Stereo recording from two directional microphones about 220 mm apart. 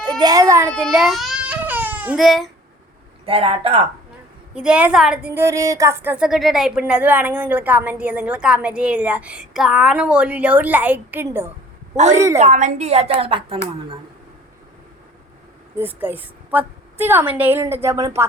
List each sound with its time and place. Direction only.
0.0 s a child's voice: 20° right (ahead or behind)
0.7 s baby cry: centre (ahead or behind)
3.2 s a woman's voice: 25° right (ahead or behind)
4.5 s a woman's voice: 5° right (ahead or behind)
12.4 s a woman's voice: 35° right (ahead or behind)
15.8 s a woman's voice: 10° right (ahead or behind)